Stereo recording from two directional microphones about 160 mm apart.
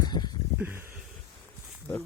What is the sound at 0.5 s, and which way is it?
Speech, 15° right (ahead or behind).